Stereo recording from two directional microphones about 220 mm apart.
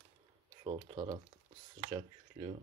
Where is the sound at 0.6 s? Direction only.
25° right (ahead or behind).